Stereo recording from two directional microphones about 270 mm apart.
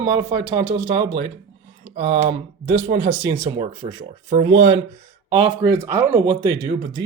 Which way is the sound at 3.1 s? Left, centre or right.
Centre.